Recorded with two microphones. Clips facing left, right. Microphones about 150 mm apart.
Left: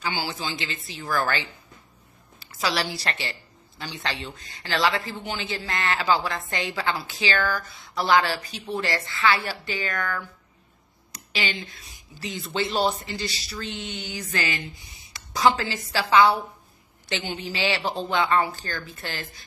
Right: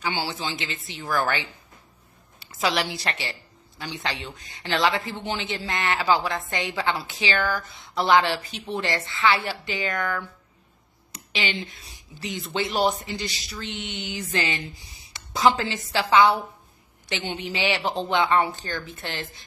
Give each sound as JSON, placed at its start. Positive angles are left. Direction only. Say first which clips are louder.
{"t": 0.4, "sound": "speech", "louder": "even", "side_deg": -20}
{"t": 1.0, "sound": "a woman's voice", "louder": "right 1 dB", "side_deg": 0}
{"t": 2.4, "sound": "a woman's voice", "louder": "right 2 dB", "side_deg": -20}